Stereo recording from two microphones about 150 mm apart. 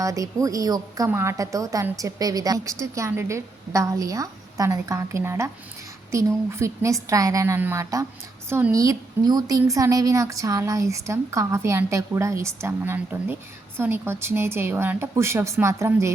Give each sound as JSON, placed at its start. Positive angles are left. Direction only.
{"t": 0.0, "sound": "a woman's voice", "side_deg": -20}